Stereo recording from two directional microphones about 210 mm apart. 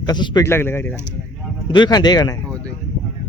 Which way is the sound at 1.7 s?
20° left (ahead or behind).